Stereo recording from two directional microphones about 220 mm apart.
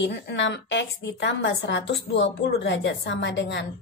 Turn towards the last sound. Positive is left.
turn(degrees=55)  # may be behind; listen again after turning